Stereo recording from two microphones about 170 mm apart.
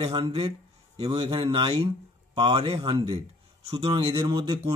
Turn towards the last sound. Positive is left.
turn(degrees=-25)  # may be behind; listen again after turning